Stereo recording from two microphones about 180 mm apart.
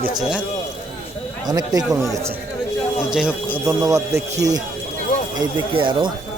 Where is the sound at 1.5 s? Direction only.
20° right (ahead or behind).